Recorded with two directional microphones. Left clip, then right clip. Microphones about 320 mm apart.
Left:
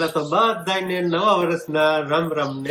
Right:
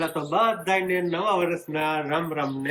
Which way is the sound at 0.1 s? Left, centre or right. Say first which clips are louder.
Left 4 dB; centre.